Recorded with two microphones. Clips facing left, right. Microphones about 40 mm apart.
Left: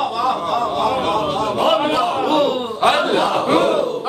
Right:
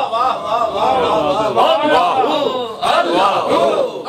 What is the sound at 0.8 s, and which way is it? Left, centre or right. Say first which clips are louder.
Speech: right 4 dB; right.